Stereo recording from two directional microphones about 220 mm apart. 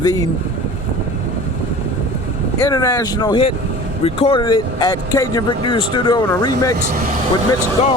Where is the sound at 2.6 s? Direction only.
15° left (ahead or behind).